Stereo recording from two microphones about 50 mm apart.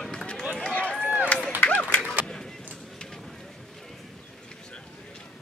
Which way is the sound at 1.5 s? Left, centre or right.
Left.